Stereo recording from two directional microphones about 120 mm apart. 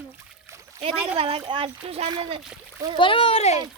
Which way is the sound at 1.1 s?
50° right (ahead or behind).